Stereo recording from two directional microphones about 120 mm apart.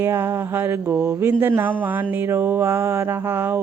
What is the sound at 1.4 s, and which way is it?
Speech, 15° right (ahead or behind).